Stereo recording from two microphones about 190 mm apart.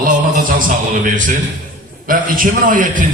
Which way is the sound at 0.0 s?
45° right (ahead or behind).